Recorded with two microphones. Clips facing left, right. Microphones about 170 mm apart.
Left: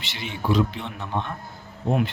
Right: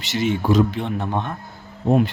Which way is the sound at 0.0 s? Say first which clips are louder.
Right 9 dB; 45° right (ahead or behind).